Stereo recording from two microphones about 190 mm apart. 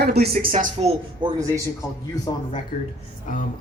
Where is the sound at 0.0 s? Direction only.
55° right (ahead or behind).